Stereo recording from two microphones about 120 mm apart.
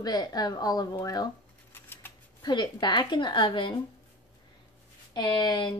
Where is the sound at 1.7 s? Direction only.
20° left (ahead or behind).